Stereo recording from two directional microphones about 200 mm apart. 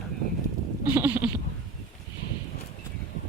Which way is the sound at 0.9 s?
10° right (ahead or behind).